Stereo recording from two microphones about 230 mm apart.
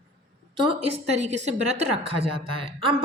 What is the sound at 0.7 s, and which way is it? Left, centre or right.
A woman's voice, right.